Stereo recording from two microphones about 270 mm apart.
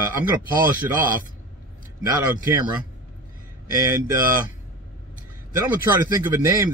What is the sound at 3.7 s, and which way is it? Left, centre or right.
Speech, centre.